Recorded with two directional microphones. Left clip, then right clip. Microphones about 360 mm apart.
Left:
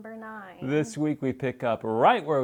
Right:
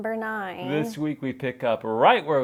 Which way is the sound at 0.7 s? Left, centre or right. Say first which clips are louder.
Left 2 dB; left.